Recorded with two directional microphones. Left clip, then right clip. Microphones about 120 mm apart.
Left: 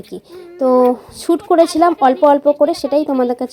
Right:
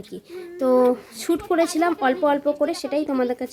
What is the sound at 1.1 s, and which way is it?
Speech, 30° left (ahead or behind).